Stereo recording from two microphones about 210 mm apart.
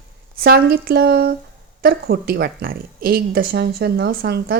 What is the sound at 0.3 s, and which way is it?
Speech, 45° right (ahead or behind).